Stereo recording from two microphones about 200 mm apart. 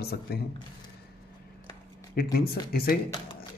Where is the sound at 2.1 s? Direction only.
50° left (ahead or behind).